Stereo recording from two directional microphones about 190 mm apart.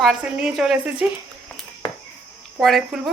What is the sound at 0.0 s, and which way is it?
Speech, 5° right (ahead or behind).